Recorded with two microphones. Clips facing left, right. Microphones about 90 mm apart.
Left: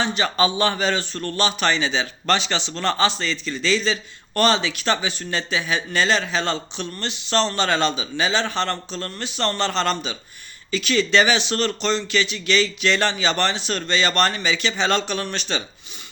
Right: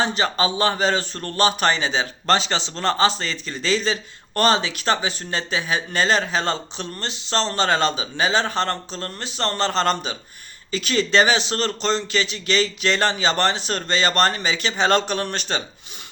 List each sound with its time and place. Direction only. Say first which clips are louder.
0.0 s speech: even; 35° right (ahead or behind)